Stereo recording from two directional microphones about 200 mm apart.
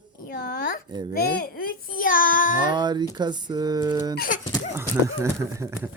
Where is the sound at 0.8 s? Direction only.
20° right (ahead or behind).